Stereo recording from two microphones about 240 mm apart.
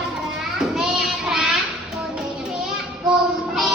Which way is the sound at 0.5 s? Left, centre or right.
Centre.